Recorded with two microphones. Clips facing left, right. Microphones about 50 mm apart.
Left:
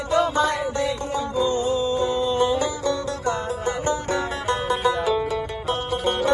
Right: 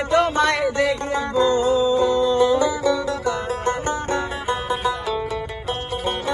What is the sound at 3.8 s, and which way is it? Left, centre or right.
Music, right.